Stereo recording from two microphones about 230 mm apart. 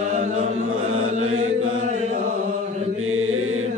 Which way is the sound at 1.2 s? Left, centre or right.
Right.